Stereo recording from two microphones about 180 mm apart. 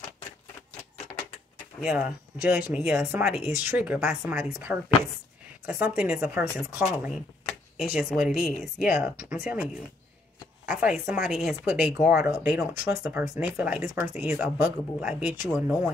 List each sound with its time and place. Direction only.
1.8 s a woman's voice: 5° right (ahead or behind)